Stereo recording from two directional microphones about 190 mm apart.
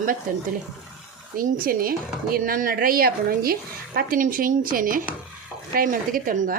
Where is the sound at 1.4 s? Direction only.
50° right (ahead or behind).